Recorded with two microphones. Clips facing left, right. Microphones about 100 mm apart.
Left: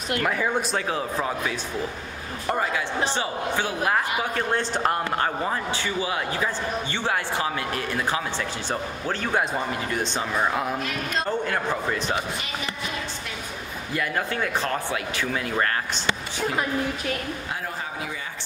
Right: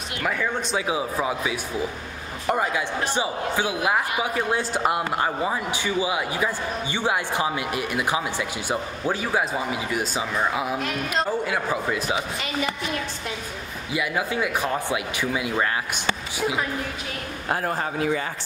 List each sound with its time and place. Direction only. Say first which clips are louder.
0.4 s speech: left 2 dB; 5° left (ahead or behind)
0.7 s a man's voice: right 1 dB; 10° right (ahead or behind)
13.9 s a man's voice: right 2 dB; 5° right (ahead or behind)
17.5 s a woman's voice: right 6 dB; 55° right (ahead or behind)